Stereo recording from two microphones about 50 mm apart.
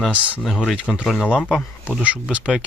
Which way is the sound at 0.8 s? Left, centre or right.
Left.